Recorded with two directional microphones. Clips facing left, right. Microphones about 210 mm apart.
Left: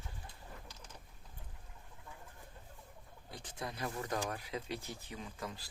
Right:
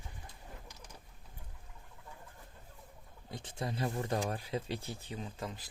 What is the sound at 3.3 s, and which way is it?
Speech, 25° right (ahead or behind).